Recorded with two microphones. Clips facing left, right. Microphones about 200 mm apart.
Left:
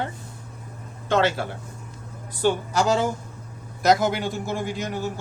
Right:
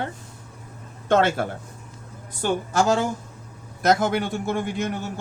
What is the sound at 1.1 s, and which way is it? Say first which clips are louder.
Speech: right 2 dB; 50° right (ahead or behind).